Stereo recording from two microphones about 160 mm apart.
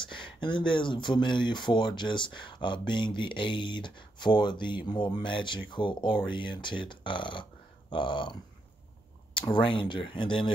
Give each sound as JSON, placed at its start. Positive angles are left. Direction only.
{"t": 0.1, "sound": "speech", "side_deg": 30}
{"t": 9.5, "sound": "speech", "side_deg": 30}